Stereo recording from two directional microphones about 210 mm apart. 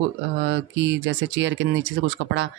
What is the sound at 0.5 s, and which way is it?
Speech, 55° right (ahead or behind).